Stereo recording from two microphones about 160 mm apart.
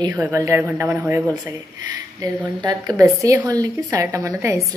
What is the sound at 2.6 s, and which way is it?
A woman's voice, 20° right (ahead or behind).